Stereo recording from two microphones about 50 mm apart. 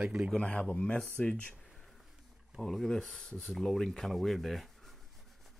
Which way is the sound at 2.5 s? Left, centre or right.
Centre.